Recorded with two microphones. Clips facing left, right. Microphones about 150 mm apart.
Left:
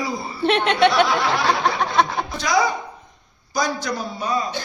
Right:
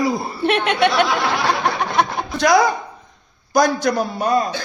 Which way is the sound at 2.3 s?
55° right (ahead or behind).